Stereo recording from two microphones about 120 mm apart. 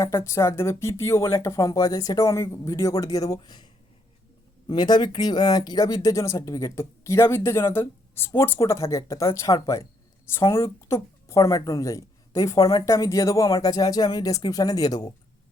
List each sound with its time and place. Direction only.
0.0 s speech: 25° left (ahead or behind)
4.7 s speech: 35° left (ahead or behind)